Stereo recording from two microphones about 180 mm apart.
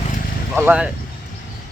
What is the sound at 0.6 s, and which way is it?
Speech, 5° right (ahead or behind).